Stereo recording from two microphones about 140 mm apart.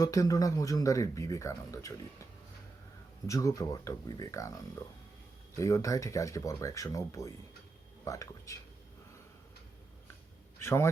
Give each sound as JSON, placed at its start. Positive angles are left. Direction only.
{"t": 0.0, "sound": "speech", "side_deg": 25}
{"t": 3.2, "sound": "speech", "side_deg": 25}
{"t": 10.6, "sound": "a man's voice", "side_deg": 20}